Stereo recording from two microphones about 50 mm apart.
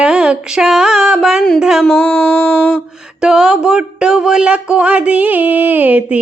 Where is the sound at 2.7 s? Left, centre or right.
Centre.